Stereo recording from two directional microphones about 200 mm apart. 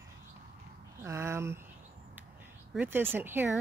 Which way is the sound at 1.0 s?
15° right (ahead or behind).